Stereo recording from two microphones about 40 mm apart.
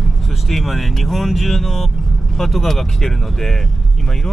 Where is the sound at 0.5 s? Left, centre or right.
Centre.